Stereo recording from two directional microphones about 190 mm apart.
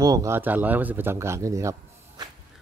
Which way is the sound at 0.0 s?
15° right (ahead or behind).